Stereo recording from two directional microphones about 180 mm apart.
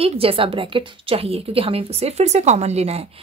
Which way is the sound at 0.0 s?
30° right (ahead or behind).